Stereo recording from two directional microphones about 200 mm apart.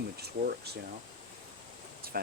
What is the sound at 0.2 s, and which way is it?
Speech, 50° right (ahead or behind).